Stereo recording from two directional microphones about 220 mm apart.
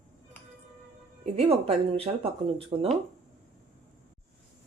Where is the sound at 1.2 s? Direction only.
25° right (ahead or behind).